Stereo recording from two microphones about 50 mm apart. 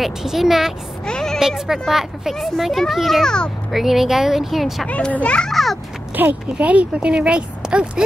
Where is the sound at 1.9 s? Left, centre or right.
Centre.